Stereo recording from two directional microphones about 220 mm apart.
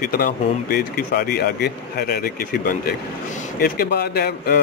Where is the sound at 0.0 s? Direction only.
40° left (ahead or behind).